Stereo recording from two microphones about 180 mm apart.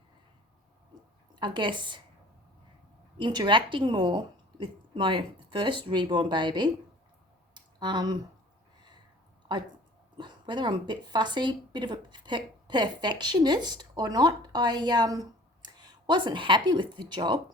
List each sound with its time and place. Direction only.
1.4 s speech: 25° right (ahead or behind)
3.2 s speech: 25° right (ahead or behind)
7.5 s clicking: 25° right (ahead or behind)
10.2 s a woman's voice: 25° right (ahead or behind)